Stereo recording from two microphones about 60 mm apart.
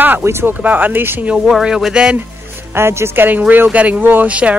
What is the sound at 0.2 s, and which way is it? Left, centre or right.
Speech, right.